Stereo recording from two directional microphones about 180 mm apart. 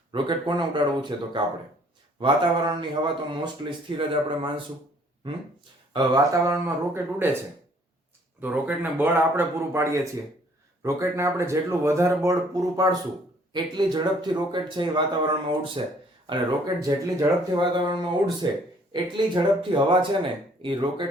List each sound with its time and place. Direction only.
0.1 s speech: 25° right (ahead or behind)
5.9 s speech: 20° right (ahead or behind)
8.4 s speech: 10° right (ahead or behind); by 20.1 s 25° right (ahead or behind)